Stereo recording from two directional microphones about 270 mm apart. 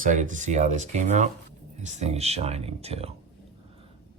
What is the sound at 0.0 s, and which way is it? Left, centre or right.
Speech, right.